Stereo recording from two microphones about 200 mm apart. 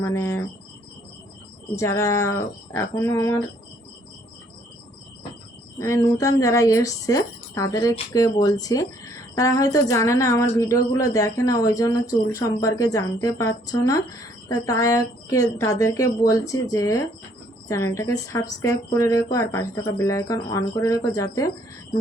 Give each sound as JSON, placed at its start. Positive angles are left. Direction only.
{"t": 0.0, "sound": "a woman's voice", "side_deg": 15}
{"t": 1.7, "sound": "a woman's voice", "side_deg": 15}
{"t": 5.8, "sound": "a woman's voice", "side_deg": 15}